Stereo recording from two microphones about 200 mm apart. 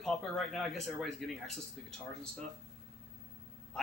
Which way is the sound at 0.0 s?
Centre (ahead or behind).